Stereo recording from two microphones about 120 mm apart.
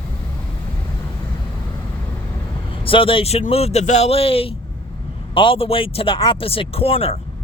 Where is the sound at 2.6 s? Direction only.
45° left (ahead or behind).